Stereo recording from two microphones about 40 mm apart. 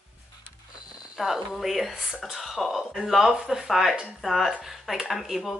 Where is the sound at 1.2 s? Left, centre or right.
Centre.